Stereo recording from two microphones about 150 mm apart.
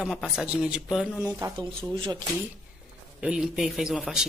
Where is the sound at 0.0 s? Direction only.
Centre (ahead or behind).